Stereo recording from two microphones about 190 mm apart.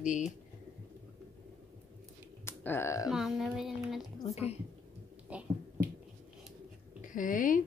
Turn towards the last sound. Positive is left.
turn(degrees=45)  # may be behind; listen again after turning